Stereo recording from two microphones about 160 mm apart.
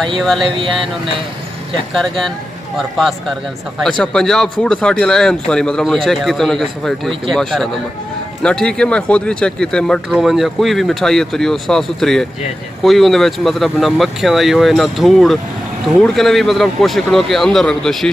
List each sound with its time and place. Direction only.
0.2 s speech: centre (ahead or behind)
2.0 s speech: centre (ahead or behind)